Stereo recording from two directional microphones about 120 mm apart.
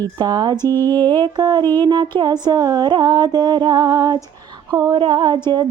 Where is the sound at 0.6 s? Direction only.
20° left (ahead or behind).